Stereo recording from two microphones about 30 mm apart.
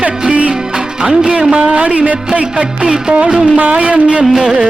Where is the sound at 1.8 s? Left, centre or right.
Right.